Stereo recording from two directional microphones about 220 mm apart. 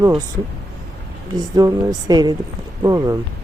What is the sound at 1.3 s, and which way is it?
Speech, 15° right (ahead or behind).